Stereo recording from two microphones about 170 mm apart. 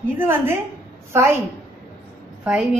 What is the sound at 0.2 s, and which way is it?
Speech, 10° right (ahead or behind).